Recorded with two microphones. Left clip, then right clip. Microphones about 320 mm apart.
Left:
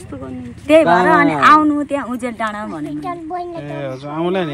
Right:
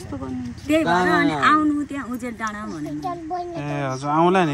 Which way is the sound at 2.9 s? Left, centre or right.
Left.